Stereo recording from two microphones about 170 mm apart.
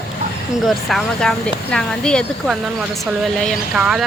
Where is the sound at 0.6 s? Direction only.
Centre (ahead or behind).